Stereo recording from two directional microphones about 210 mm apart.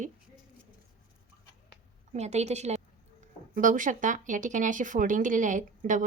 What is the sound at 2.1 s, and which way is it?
Speech, 30° right (ahead or behind).